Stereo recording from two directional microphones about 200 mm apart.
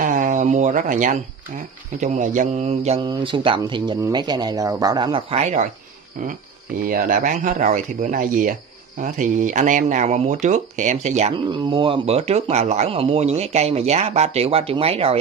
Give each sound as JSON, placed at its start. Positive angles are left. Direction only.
{"t": 0.0, "sound": "a sound", "side_deg": -40}
{"t": 2.0, "sound": "speech", "side_deg": -35}
{"t": 6.8, "sound": "speech", "side_deg": -45}